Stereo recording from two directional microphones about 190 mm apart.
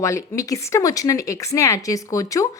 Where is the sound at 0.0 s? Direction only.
15° left (ahead or behind).